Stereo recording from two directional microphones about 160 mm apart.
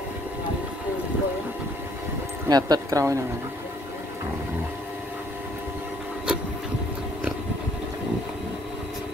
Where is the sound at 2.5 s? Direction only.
25° right (ahead or behind).